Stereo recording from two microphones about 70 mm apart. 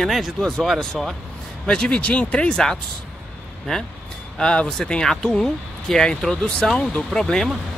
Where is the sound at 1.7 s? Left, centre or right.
Centre.